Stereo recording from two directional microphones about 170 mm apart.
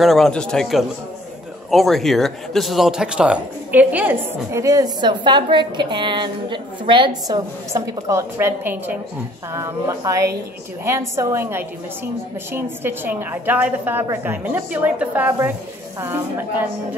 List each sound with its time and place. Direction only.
0.0 s speech: centre (ahead or behind)